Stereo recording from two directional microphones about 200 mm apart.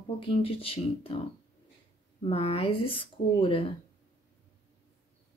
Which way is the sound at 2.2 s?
30° left (ahead or behind).